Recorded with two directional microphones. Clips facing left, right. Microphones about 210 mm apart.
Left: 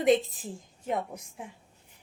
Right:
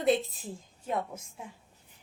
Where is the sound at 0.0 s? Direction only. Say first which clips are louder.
Left 3 dB; 15° left (ahead or behind).